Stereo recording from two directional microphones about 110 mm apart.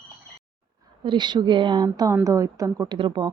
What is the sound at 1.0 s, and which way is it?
Speech, 45° right (ahead or behind).